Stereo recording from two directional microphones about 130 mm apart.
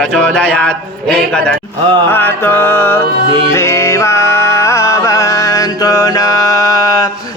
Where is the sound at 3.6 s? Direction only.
25° left (ahead or behind).